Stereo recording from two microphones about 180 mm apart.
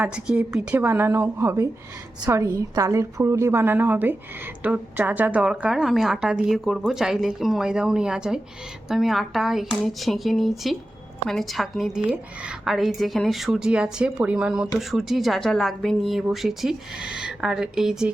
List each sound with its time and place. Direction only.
0.0 s a woman's voice: 5° right (ahead or behind)